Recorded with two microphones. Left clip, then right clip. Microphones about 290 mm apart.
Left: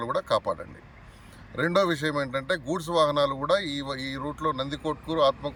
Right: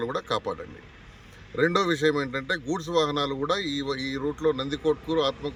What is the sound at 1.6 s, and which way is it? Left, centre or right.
Speech, centre.